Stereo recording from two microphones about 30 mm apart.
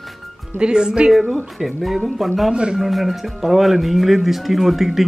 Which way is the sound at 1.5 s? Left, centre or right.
Centre.